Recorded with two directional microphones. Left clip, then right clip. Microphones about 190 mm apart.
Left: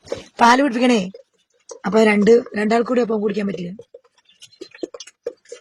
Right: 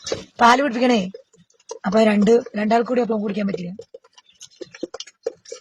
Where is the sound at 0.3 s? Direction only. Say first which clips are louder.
Left 1 dB; 30° left (ahead or behind).